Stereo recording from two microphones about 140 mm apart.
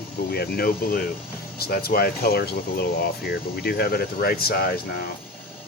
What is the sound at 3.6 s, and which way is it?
Speech, 90° left.